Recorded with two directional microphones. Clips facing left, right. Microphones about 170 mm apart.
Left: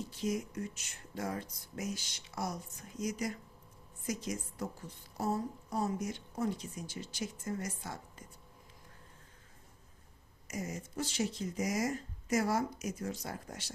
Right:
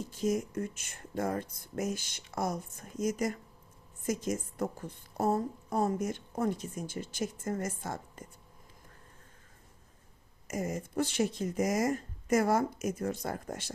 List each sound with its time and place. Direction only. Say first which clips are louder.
0.1 s a woman's voice: right 7 dB; 45° right (ahead or behind)
10.5 s a woman's voice: right 6 dB; 55° right (ahead or behind)